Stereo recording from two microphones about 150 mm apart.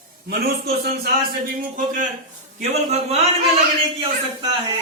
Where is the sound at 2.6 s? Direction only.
45° right (ahead or behind).